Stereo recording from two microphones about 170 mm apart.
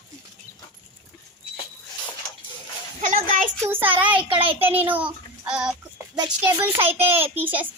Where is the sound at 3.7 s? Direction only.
10° right (ahead or behind).